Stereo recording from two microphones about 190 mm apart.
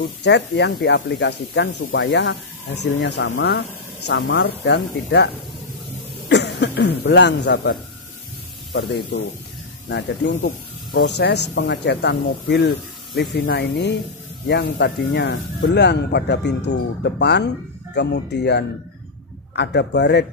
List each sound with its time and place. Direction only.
0.0 s a man's voice: 65° left (ahead or behind)
8.7 s speech: 60° left (ahead or behind)